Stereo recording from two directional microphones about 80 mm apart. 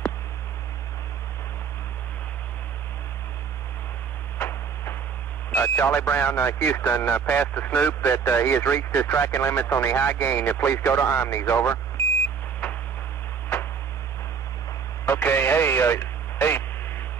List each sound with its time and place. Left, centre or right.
4.4 s a sound: left
5.5 s speech: left
8.0 s speech: left
15.0 s radio: left